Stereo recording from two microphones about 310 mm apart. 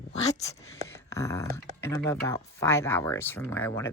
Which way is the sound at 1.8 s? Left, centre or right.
Centre.